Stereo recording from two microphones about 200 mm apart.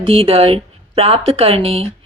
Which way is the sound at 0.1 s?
30° right (ahead or behind).